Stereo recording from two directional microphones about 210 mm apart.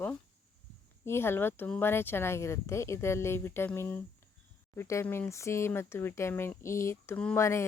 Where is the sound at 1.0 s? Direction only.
10° left (ahead or behind).